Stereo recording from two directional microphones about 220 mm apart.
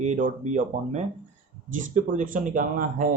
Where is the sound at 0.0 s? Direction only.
30° right (ahead or behind).